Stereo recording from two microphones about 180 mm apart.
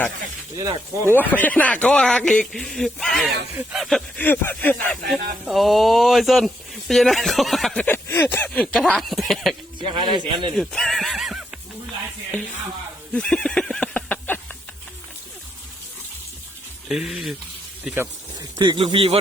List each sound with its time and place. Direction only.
0.6 s speech: 15° right (ahead or behind)
1.1 s speech: 10° left (ahead or behind)
3.6 s a sound: centre (ahead or behind)
5.5 s speech: centre (ahead or behind)
9.8 s a man's voice: 25° right (ahead or behind)
10.6 s speech: 5° left (ahead or behind)
13.1 s neigh: 5° left (ahead or behind)
16.9 s speech: centre (ahead or behind)
17.8 s speech: 15° right (ahead or behind); by 19.2 s 30° right (ahead or behind)